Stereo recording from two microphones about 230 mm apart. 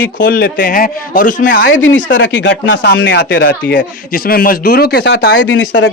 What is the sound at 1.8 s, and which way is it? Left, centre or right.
Speech, left.